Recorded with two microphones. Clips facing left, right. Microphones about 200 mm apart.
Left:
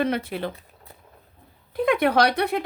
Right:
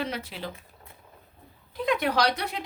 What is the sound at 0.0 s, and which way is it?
Speech, 55° left (ahead or behind).